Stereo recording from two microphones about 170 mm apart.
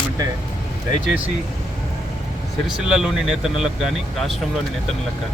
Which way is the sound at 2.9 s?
5° right (ahead or behind).